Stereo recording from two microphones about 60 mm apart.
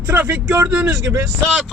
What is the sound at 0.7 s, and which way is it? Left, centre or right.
Speech, right.